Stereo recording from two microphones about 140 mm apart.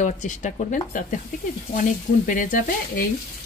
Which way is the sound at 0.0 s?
65° left (ahead or behind).